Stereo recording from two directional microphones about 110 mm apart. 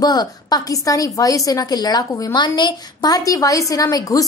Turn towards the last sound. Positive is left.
turn(degrees=35)  # may be behind; listen again after turning